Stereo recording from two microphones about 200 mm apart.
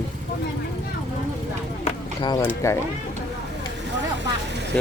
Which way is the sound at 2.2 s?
20° left (ahead or behind).